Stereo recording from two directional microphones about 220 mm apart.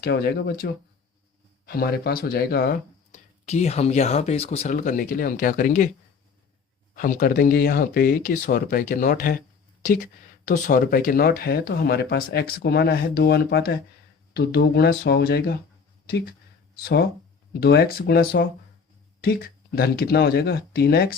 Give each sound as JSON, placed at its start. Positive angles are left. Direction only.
{"t": 0.0, "sound": "speech", "side_deg": 45}
{"t": 6.9, "sound": "speech", "side_deg": 40}